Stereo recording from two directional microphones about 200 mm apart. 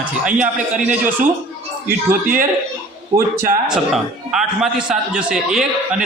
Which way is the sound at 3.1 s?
15° right (ahead or behind).